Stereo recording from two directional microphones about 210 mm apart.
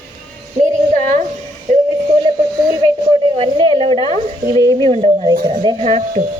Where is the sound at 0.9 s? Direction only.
35° right (ahead or behind).